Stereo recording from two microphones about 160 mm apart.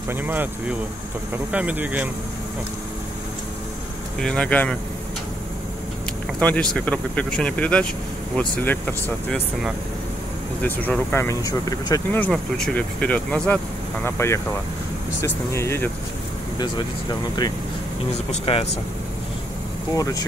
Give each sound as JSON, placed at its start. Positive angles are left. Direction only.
{"t": 0.1, "sound": "speech", "side_deg": -10}
{"t": 4.2, "sound": "speech", "side_deg": 5}
{"t": 6.4, "sound": "speech", "side_deg": 5}
{"t": 10.6, "sound": "speech", "side_deg": 10}
{"t": 12.2, "sound": "speech", "side_deg": 5}
{"t": 16.5, "sound": "speech", "side_deg": 30}
{"t": 18.1, "sound": "speech", "side_deg": 40}
{"t": 20.0, "sound": "speech", "side_deg": 20}